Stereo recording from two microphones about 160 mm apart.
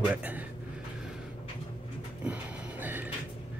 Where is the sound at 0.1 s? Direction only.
10° right (ahead or behind).